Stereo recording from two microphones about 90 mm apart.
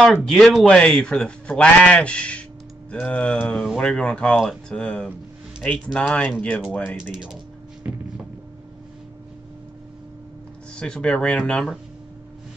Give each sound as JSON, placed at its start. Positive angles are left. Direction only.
{"t": 0.0, "sound": "speech", "side_deg": 5}
{"t": 0.7, "sound": "a man's voice", "side_deg": 10}
{"t": 7.0, "sound": "speech", "side_deg": -5}
{"t": 7.8, "sound": "a sound", "side_deg": -15}
{"t": 10.8, "sound": "a man's voice", "side_deg": 10}